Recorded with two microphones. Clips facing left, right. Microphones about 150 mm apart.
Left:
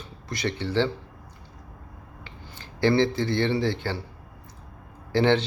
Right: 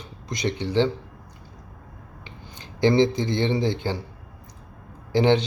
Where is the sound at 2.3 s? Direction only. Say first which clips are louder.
Right 3 dB; 15° right (ahead or behind).